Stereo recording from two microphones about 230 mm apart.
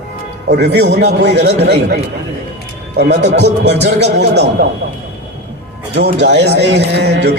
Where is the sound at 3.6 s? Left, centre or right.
Right.